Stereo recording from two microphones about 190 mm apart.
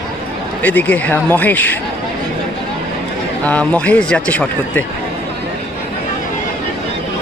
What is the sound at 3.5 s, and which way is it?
Speech, 5° left (ahead or behind).